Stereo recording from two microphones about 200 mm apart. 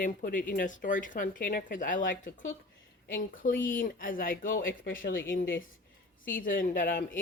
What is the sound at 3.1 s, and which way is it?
Speech, 45° left (ahead or behind).